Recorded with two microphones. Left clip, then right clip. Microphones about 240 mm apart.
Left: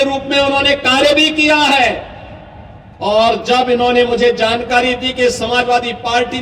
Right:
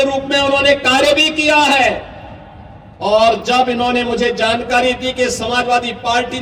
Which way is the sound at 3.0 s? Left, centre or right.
Right.